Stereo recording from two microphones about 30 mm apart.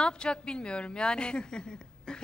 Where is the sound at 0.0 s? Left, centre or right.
Left.